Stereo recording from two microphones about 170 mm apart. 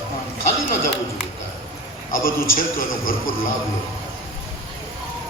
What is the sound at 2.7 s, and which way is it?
Speech, 60° left (ahead or behind).